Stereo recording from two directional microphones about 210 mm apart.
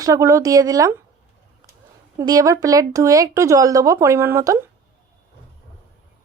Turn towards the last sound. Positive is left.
turn(degrees=-15)  # may be behind; listen again after turning